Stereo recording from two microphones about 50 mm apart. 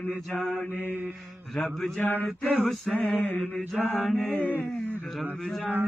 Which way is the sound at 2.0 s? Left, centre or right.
Left.